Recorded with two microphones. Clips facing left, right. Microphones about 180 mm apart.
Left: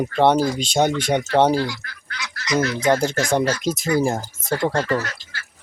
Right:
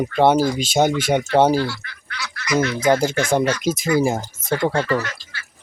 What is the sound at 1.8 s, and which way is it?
Fowl, 40° left (ahead or behind).